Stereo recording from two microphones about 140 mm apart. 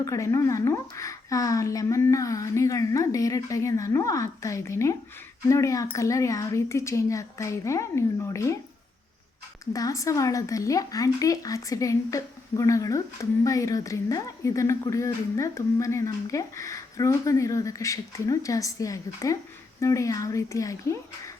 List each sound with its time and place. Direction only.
0.0 s speech: 25° left (ahead or behind)
9.7 s speech: 25° left (ahead or behind)